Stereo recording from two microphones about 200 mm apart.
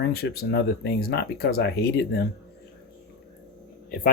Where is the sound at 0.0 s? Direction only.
55° left (ahead or behind).